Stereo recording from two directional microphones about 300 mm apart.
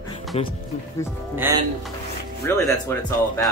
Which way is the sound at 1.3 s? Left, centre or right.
Centre.